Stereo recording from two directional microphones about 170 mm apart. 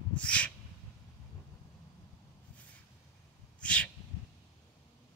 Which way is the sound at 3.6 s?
5° left (ahead or behind).